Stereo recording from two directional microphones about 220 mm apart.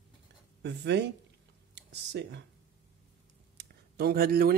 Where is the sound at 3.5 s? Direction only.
45° right (ahead or behind).